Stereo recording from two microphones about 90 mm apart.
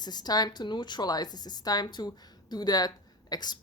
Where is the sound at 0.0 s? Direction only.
50° left (ahead or behind).